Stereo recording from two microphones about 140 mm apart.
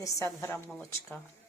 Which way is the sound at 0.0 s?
20° left (ahead or behind).